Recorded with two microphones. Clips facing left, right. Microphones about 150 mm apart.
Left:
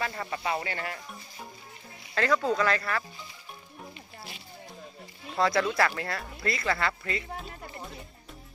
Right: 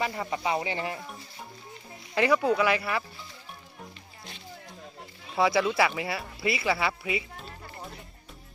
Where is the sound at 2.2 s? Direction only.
10° right (ahead or behind).